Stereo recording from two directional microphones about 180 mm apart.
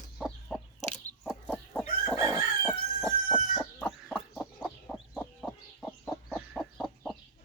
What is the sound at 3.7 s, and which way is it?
Chicken, 10° left (ahead or behind).